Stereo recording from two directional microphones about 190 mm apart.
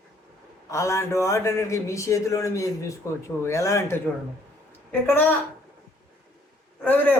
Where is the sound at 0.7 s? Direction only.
15° left (ahead or behind).